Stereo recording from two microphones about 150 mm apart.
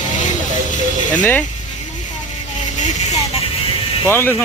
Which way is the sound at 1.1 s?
10° left (ahead or behind).